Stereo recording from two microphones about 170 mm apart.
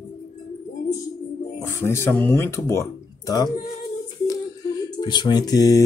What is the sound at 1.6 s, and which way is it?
Speech, 15° left (ahead or behind).